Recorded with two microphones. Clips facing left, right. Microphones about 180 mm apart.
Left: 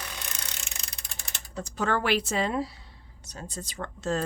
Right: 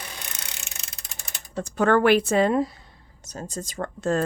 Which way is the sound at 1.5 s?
55° right (ahead or behind).